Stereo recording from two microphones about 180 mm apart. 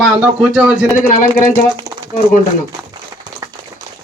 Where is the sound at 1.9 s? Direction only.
60° right (ahead or behind).